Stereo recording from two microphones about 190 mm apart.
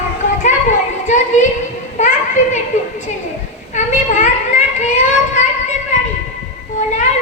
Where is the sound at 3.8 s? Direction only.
40° left (ahead or behind).